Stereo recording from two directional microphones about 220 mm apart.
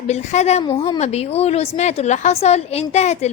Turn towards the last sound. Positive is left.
turn(degrees=30)  # may be behind; listen again after turning